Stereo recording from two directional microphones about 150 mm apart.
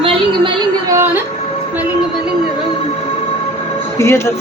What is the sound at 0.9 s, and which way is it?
Music, 15° right (ahead or behind).